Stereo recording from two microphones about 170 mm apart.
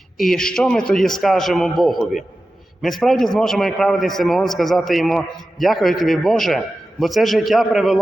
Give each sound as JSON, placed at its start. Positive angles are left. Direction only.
{"t": 0.2, "sound": "a man's voice", "side_deg": 5}